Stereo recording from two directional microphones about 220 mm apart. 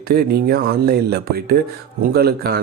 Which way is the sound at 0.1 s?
45° right (ahead or behind).